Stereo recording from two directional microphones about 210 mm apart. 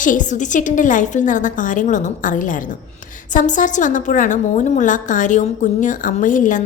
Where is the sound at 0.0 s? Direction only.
40° left (ahead or behind).